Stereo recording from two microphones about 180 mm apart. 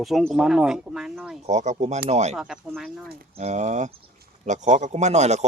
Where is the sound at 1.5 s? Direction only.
40° right (ahead or behind).